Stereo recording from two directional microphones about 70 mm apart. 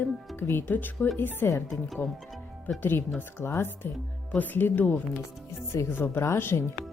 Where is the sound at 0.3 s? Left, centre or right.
Left.